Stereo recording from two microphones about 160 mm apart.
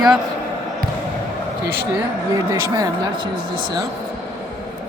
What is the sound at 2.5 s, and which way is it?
Speech, 20° right (ahead or behind).